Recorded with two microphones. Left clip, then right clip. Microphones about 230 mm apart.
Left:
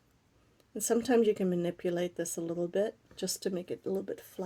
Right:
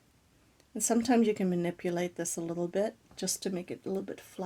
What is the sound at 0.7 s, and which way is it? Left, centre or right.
A woman's voice, right.